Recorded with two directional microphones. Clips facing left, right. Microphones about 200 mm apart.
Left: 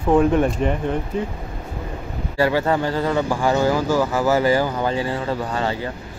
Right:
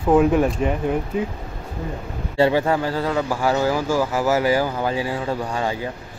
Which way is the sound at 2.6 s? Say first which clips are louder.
Left 1 dB; 5° right (ahead or behind).